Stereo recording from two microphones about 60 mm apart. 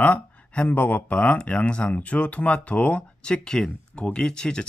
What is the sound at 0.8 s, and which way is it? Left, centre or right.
Speech, left.